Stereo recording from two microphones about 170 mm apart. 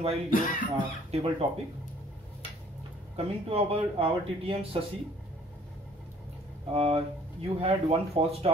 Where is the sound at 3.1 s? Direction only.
35° right (ahead or behind).